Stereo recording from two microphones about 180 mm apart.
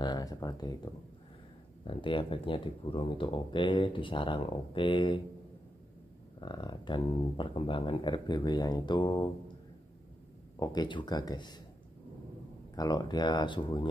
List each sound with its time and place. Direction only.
0.0 s speech: 20° left (ahead or behind)
1.9 s speech: 30° left (ahead or behind)
6.4 s speech: 25° left (ahead or behind)
10.6 s speech: 25° left (ahead or behind)
12.7 s speech: 20° left (ahead or behind)